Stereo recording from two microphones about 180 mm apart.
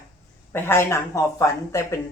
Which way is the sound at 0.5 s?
10° left (ahead or behind).